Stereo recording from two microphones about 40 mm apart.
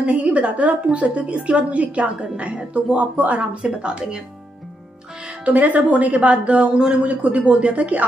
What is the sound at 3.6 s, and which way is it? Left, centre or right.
Speech, right.